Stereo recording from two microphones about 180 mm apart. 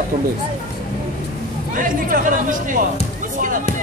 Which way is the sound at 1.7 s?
50° right (ahead or behind).